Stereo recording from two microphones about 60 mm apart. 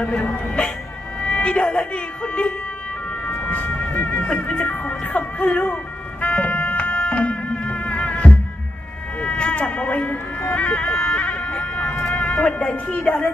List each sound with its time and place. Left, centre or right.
0.0 s speech: centre
3.9 s music: left
4.2 s speech: left
6.2 s music: left
9.2 s a sound: centre
12.0 s speech: left